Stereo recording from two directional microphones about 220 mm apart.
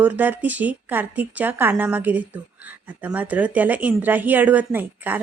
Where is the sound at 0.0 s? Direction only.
10° right (ahead or behind).